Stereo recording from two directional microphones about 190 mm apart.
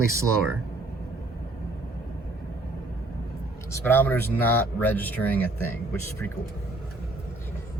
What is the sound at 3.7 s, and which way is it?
Speech, 10° left (ahead or behind).